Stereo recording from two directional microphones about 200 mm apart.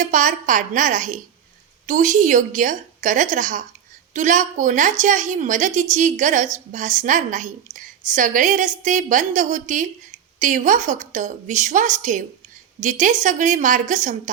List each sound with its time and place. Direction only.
0.0 s a woman's voice: 40° right (ahead or behind)